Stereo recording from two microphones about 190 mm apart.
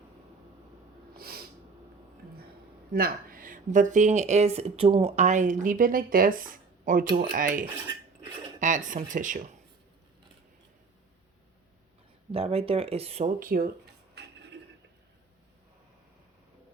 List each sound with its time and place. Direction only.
1.1 s snort: 55° right (ahead or behind)
2.9 s speech: 50° right (ahead or behind)
12.3 s speech: 30° right (ahead or behind)
13.4 s speech: 50° right (ahead or behind)